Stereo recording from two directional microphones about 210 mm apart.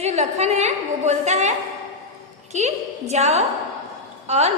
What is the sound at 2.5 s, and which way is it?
A woman's voice, 30° right (ahead or behind).